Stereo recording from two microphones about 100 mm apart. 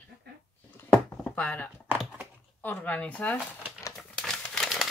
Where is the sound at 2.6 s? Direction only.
15° left (ahead or behind).